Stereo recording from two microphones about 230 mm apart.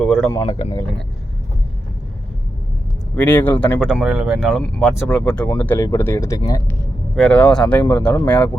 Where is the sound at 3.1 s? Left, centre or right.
Centre.